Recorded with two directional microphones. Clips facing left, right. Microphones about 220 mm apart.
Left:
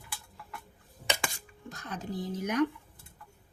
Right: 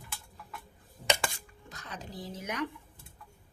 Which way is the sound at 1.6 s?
50° left (ahead or behind).